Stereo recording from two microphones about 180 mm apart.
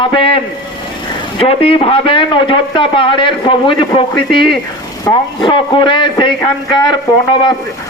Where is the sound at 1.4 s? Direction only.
30° left (ahead or behind).